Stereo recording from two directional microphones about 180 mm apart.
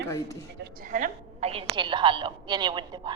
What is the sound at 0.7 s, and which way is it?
A woman's voice, 50° right (ahead or behind).